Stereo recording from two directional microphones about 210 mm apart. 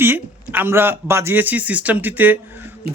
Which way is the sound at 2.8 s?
45° right (ahead or behind).